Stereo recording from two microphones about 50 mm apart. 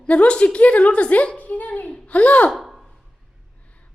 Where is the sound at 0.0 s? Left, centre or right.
Left.